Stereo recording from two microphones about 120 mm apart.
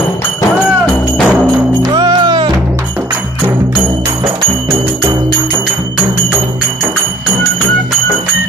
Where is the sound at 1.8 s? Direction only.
35° right (ahead or behind).